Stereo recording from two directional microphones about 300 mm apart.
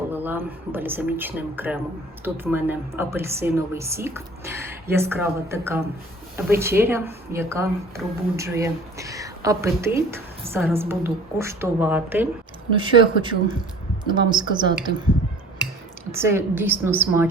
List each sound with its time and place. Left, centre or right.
0.1 s a woman's voice: centre
12.7 s a woman's voice: centre
16.1 s a woman's voice: centre